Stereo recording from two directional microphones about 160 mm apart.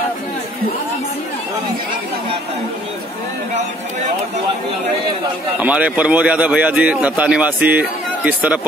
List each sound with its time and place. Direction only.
5.6 s a man's voice: 10° right (ahead or behind)